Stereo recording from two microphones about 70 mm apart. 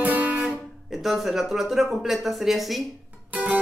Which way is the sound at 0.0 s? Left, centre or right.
Right.